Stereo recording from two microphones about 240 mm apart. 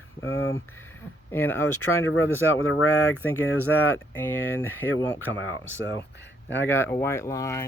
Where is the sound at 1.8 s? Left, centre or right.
Left.